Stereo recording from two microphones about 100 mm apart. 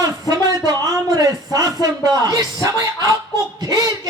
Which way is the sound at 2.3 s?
40° right (ahead or behind).